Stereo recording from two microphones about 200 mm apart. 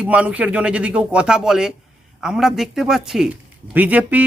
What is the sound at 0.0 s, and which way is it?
Speech, 5° right (ahead or behind).